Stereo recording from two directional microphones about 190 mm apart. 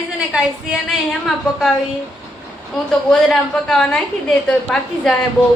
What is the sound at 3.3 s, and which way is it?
Speech, 5° left (ahead or behind).